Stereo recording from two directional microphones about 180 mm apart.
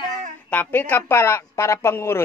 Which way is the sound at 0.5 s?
10° left (ahead or behind).